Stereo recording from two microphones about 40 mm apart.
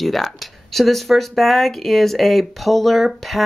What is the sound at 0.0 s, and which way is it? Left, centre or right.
Speech, centre.